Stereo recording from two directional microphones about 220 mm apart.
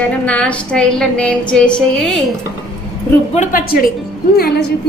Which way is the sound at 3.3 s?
35° left (ahead or behind).